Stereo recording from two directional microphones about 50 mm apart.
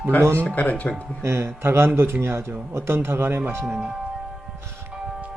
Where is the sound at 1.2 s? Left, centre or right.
Right.